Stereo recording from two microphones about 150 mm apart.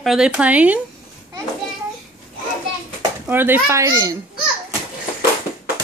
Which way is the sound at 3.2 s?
15° right (ahead or behind).